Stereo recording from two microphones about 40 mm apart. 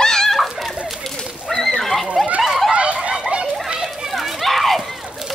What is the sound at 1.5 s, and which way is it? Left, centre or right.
Neigh, centre.